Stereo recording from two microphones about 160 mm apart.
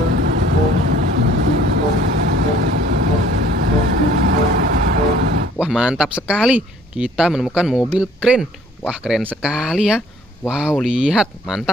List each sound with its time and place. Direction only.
0.1 s vehicle: 85° right
5.6 s speech: 5° right (ahead or behind)